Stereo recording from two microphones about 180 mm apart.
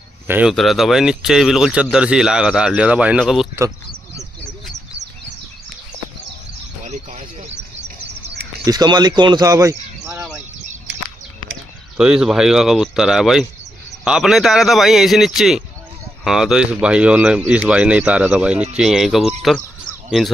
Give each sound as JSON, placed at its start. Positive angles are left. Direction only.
{"t": 0.3, "sound": "speech", "side_deg": -5}
{"t": 6.8, "sound": "a sound", "side_deg": -45}
{"t": 8.6, "sound": "speech", "side_deg": -20}
{"t": 12.0, "sound": "speech", "side_deg": -5}